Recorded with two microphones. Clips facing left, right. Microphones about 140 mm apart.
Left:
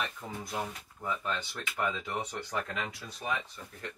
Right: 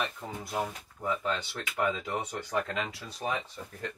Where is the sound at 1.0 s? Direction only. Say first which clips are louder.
Right 3 dB; 15° right (ahead or behind).